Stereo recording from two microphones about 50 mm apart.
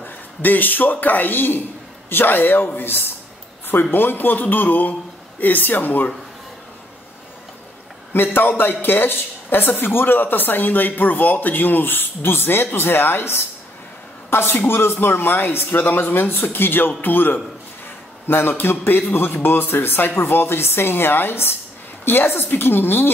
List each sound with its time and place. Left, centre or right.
0.0 s a woman's voice: left
8.1 s a woman's voice: left